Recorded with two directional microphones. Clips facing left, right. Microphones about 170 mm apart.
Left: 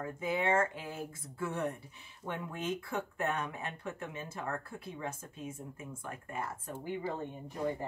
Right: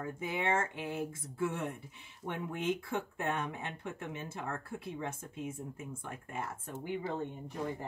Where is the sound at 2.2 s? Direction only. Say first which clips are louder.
Right 2 dB; 25° right (ahead or behind).